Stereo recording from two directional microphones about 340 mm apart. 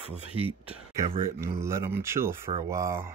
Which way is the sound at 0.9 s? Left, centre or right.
Centre.